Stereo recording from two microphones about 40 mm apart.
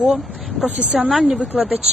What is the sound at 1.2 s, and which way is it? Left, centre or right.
Speech, right.